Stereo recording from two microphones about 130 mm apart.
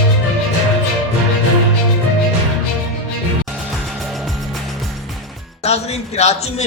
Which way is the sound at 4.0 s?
Centre (ahead or behind).